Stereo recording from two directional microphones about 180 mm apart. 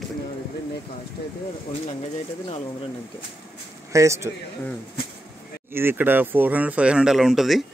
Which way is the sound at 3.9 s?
15° right (ahead or behind).